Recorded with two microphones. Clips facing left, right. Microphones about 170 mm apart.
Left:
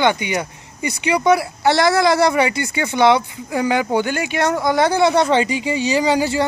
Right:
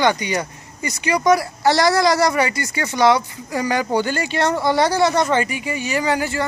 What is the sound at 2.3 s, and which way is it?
Speech, 15° left (ahead or behind).